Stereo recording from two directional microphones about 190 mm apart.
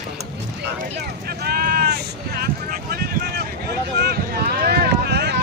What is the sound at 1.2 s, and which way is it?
Vehicle, 55° right (ahead or behind).